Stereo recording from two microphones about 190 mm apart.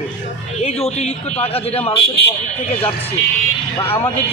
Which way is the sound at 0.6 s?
35° left (ahead or behind).